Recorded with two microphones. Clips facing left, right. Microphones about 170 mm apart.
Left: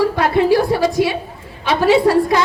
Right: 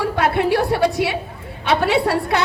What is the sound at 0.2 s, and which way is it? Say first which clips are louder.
A woman's voice: left 1 dB; 65° right (ahead or behind).